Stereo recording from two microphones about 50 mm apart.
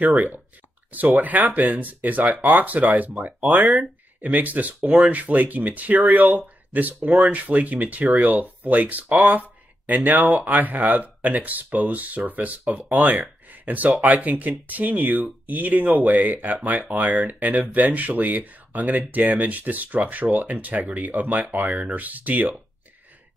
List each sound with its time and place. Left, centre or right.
0.0 s speech: right